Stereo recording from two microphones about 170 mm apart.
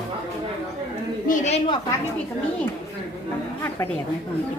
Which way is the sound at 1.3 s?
40° left (ahead or behind).